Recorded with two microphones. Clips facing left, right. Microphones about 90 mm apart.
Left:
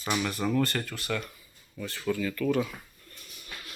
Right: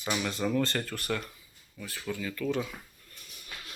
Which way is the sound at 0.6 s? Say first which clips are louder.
Left 2 dB; 25° right (ahead or behind).